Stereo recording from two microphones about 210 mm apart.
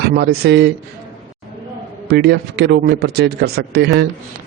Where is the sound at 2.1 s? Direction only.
50° right (ahead or behind).